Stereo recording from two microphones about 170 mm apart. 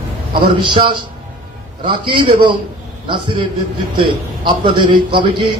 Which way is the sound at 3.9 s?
30° right (ahead or behind).